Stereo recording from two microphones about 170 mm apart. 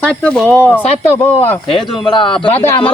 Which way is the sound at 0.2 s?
5° left (ahead or behind).